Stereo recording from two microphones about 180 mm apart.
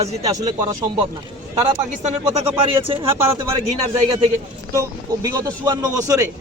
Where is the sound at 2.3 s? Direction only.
30° right (ahead or behind).